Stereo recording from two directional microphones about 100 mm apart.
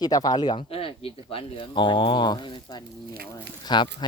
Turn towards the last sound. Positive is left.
turn(degrees=50)  # may be behind; listen again after turning